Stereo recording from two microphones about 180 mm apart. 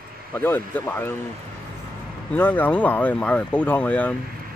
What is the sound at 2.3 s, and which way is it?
Speech, 10° left (ahead or behind).